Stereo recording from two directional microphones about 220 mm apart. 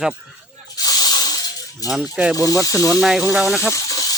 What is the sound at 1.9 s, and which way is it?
Speech, 5° right (ahead or behind).